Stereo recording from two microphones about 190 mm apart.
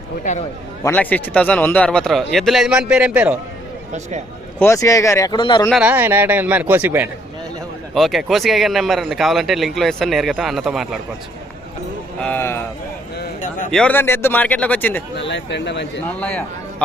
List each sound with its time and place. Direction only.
0.9 s speech: 10° left (ahead or behind); by 3.3 s 5° right (ahead or behind)
4.6 s speech: 15° left (ahead or behind)
5.8 s speech: 10° right (ahead or behind)
12.2 s speech: 10° left (ahead or behind)
13.1 s a sound: 45° left (ahead or behind)
13.7 s speech: 5° left (ahead or behind)
15.1 s speech: 65° left (ahead or behind)